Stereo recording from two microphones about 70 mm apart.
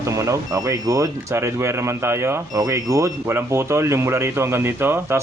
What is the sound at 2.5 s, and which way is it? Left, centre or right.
Speech, right.